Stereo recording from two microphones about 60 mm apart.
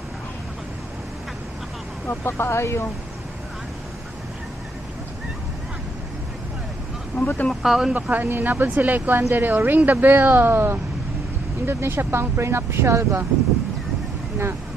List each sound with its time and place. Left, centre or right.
2.0 s speech: left
7.2 s speech: left
7.6 s speech: centre
7.9 s a woman's voice: right